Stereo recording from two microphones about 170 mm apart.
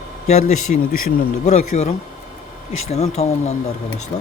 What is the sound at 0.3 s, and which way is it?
Speech, 40° left (ahead or behind).